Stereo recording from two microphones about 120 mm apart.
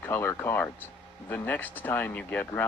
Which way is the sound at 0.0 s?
15° left (ahead or behind).